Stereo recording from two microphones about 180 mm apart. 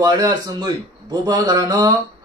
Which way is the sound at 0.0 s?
20° right (ahead or behind).